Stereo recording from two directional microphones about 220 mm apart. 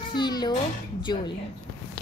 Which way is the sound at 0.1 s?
20° left (ahead or behind).